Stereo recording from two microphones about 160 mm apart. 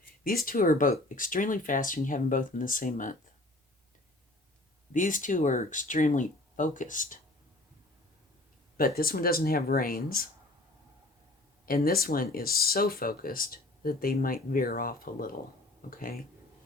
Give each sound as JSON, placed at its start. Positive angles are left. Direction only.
{"t": 0.3, "sound": "speech", "side_deg": 65}
{"t": 4.9, "sound": "speech", "side_deg": 55}
{"t": 9.0, "sound": "speech", "side_deg": 65}
{"t": 11.6, "sound": "speech", "side_deg": 65}